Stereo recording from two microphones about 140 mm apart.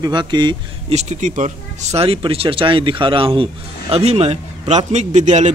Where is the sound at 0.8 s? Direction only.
55° right (ahead or behind).